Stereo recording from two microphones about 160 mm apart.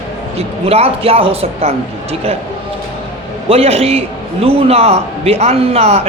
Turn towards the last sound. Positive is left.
turn(degrees=-40)  # may be behind; listen again after turning